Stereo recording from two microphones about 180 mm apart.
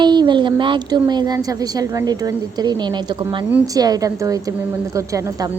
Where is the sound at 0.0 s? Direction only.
25° right (ahead or behind).